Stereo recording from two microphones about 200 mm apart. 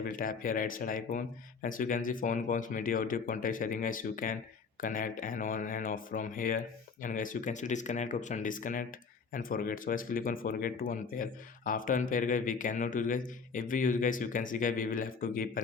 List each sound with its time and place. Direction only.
0.0 s speech: 45° left (ahead or behind)